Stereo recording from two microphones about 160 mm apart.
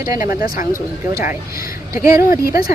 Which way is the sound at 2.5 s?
70° left (ahead or behind).